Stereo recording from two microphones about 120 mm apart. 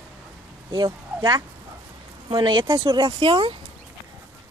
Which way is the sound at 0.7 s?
35° right (ahead or behind).